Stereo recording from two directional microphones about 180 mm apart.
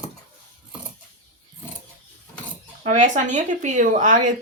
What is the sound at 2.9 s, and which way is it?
Speech, 40° right (ahead or behind).